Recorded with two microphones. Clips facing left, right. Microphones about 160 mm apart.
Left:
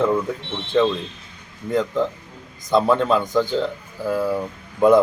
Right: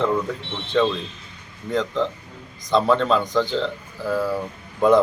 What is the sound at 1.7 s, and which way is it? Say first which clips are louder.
A man's voice: left 2 dB; 10° left (ahead or behind).